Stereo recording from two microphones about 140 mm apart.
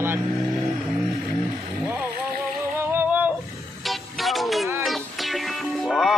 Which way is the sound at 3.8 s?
Centre (ahead or behind).